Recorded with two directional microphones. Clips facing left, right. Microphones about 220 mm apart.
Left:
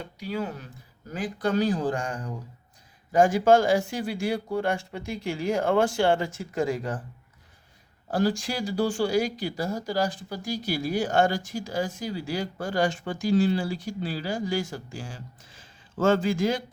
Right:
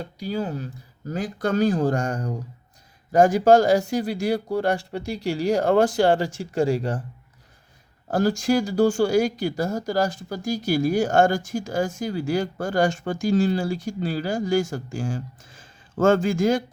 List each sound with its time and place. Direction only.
0.0 s speech: 35° right (ahead or behind)
8.0 s speech: 45° right (ahead or behind)